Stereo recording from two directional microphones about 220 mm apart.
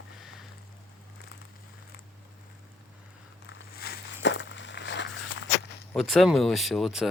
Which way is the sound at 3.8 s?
50° left (ahead or behind).